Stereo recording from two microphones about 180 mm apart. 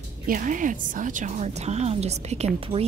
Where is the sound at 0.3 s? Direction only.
45° right (ahead or behind).